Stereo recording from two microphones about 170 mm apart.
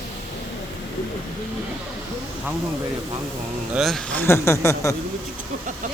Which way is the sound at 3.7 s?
Centre (ahead or behind).